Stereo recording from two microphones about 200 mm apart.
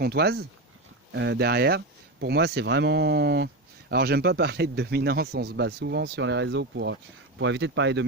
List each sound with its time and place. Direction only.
0.0 s speech: 55° right (ahead or behind)